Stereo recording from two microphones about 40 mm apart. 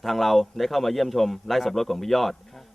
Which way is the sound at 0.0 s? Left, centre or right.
Centre.